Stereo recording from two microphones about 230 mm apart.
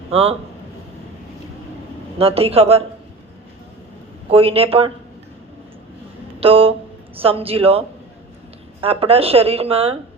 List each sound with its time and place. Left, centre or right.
0.1 s speech: right
2.1 s speech: right
4.3 s speech: right
6.4 s speech: right